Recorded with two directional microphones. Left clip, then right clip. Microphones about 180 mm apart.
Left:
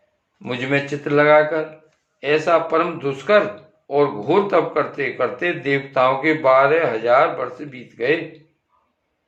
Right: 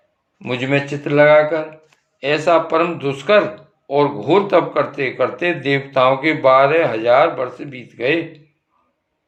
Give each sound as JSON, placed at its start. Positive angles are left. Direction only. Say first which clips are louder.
{"t": 0.4, "sound": "speech", "louder": "right 2 dB", "side_deg": -30}